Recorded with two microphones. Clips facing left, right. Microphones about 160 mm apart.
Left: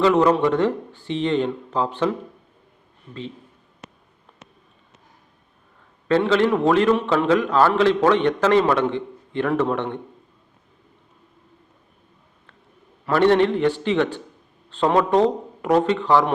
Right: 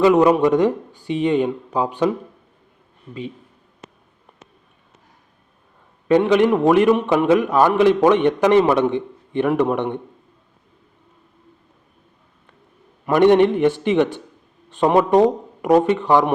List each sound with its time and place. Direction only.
0.0 s a man's voice: 15° right (ahead or behind)
3.8 s a sound: 70° left (ahead or behind)
6.1 s a man's voice: 15° right (ahead or behind)
13.1 s a man's voice: 15° right (ahead or behind)